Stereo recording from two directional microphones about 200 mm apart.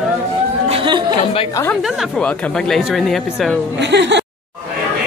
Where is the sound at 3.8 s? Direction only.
60° right (ahead or behind).